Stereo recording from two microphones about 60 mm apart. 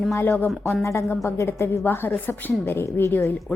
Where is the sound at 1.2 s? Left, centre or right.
Left.